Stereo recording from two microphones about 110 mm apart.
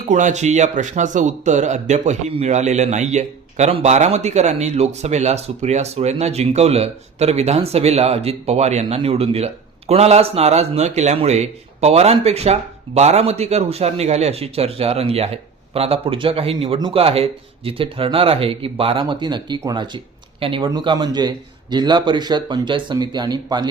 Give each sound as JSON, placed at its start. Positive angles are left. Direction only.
{"t": 0.1, "sound": "speech", "side_deg": -90}
{"t": 16.9, "sound": "speech", "side_deg": -60}
{"t": 20.7, "sound": "a man's voice", "side_deg": -35}